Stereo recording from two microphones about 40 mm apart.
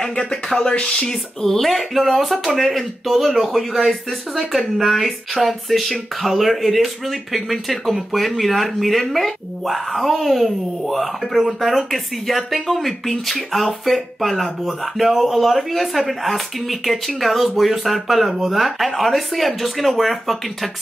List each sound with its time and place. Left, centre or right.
0.1 s speech: left
1.0 s speech: centre